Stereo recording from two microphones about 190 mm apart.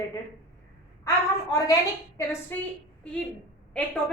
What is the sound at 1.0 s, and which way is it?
Speech, 20° left (ahead or behind).